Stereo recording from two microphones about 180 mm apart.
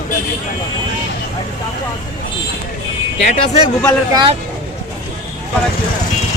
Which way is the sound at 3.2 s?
40° left (ahead or behind).